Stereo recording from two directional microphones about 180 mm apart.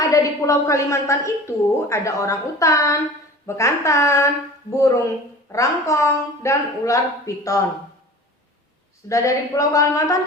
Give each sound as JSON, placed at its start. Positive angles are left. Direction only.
{"t": 0.1, "sound": "a woman's voice", "side_deg": 15}
{"t": 9.0, "sound": "a woman's voice", "side_deg": 20}